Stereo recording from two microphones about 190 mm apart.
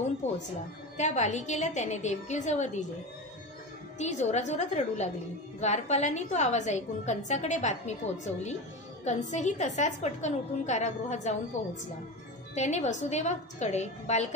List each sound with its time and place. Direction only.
0.2 s a woman's voice: 35° left (ahead or behind)
4.0 s a woman's voice: 35° left (ahead or behind)
9.0 s a woman's voice: 40° left (ahead or behind)
12.5 s a woman's voice: 40° left (ahead or behind)